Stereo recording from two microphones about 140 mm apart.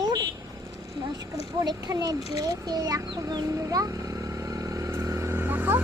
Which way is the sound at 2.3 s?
25° right (ahead or behind).